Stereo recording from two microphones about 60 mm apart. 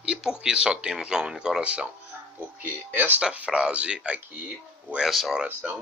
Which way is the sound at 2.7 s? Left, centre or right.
Right.